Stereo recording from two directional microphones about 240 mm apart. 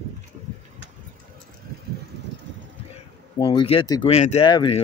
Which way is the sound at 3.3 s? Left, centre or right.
Left.